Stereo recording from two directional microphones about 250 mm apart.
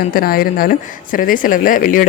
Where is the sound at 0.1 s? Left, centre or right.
Left.